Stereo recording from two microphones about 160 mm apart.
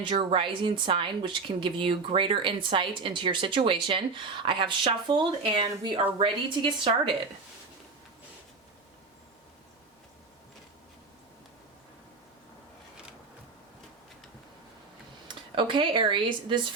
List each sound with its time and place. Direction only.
0.0 s a woman's voice: 30° right (ahead or behind)
15.3 s speech: 30° right (ahead or behind)